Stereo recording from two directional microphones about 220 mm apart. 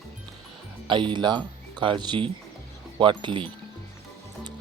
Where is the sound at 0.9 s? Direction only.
20° right (ahead or behind).